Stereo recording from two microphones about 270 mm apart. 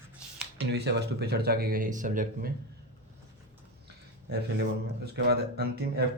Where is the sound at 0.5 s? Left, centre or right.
Right.